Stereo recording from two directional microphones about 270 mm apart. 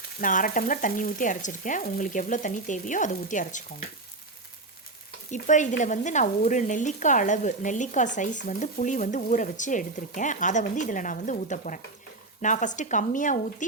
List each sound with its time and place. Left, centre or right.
0.2 s frying: left
5.3 s frying: left